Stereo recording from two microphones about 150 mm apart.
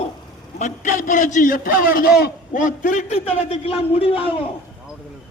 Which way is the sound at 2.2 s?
60° left (ahead or behind).